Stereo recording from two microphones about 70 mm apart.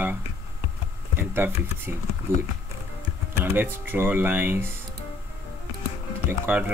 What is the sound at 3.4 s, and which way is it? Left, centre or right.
Speech, right.